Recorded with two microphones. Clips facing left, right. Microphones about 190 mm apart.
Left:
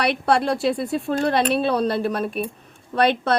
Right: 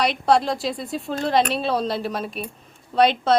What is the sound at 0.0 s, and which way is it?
A woman's voice, 60° left (ahead or behind).